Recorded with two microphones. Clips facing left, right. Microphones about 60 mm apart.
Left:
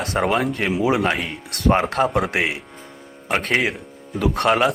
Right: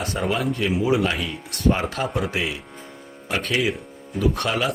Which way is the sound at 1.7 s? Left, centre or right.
Left.